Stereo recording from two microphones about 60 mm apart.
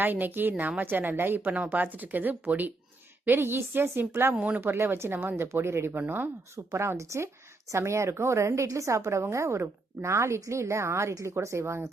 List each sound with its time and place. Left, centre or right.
0.0 s a woman's voice: right
1.5 s speech: right
3.2 s a woman's voice: right
4.4 s speech: right
4.6 s a woman's voice: right
6.7 s a woman's voice: right